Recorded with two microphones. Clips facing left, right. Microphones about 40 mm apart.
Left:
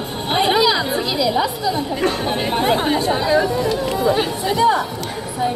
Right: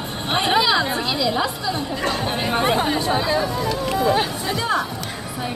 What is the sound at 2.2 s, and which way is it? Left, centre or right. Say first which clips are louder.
Speech: left 3 dB; centre.